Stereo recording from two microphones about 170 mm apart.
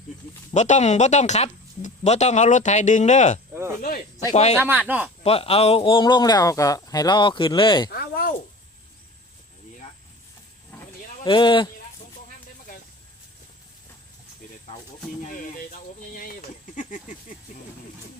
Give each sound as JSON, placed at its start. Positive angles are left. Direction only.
{"t": 0.5, "sound": "speech", "side_deg": 45}
{"t": 3.5, "sound": "speech", "side_deg": -15}
{"t": 3.8, "sound": "speech", "side_deg": 55}
{"t": 4.5, "sound": "speech", "side_deg": -10}
{"t": 5.2, "sound": "a man's voice", "side_deg": 35}
{"t": 7.9, "sound": "a sound", "side_deg": 65}
{"t": 11.2, "sound": "a man's voice", "side_deg": 30}
{"t": 15.2, "sound": "a sound", "side_deg": 50}